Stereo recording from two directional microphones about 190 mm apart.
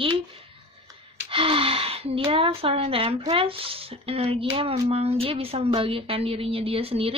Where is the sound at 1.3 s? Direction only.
30° right (ahead or behind).